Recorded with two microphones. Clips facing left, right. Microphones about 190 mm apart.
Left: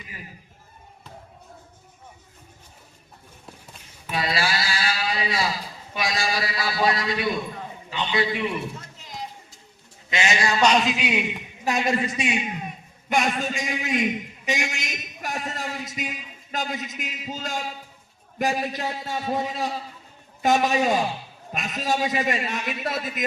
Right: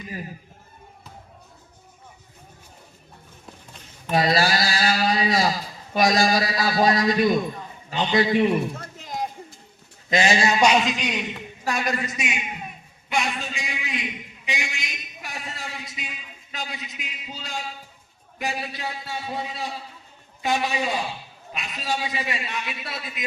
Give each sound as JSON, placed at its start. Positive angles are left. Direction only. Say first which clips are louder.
{"t": 4.1, "sound": "a man's voice", "louder": "right 5 dB", "side_deg": -40}
{"t": 8.8, "sound": "a sound", "louder": "right 7 dB", "side_deg": -50}
{"t": 10.1, "sound": "a man's voice", "louder": "right 4 dB", "side_deg": -35}
{"t": 10.6, "sound": "a man's voice", "louder": "left 1 dB", "side_deg": -10}
{"t": 10.8, "sound": "a man's voice", "louder": "left 2 dB", "side_deg": 5}
{"t": 11.6, "sound": "a man's voice", "louder": "left 3 dB", "side_deg": 20}
{"t": 13.1, "sound": "a man's voice", "louder": "left 3 dB", "side_deg": 45}